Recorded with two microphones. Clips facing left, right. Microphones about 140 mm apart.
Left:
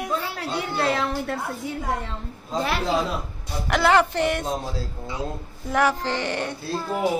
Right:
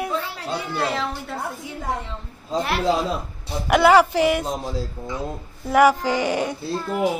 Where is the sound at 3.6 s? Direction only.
5° right (ahead or behind).